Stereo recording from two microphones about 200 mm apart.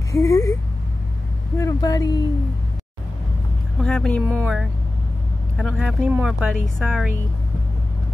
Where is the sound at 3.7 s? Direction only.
5° left (ahead or behind).